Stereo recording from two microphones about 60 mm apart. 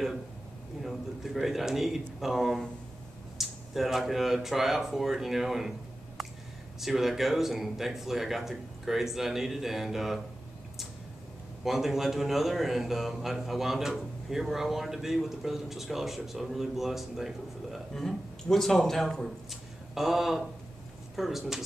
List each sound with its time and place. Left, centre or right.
0.8 s a man's voice: centre
6.8 s a man's voice: centre
11.6 s a man's voice: centre